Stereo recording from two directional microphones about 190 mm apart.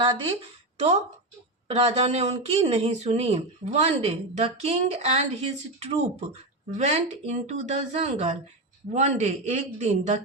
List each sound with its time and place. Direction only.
0.0 s speech: 25° right (ahead or behind)